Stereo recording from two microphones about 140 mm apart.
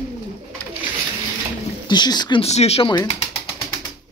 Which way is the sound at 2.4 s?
50° left (ahead or behind).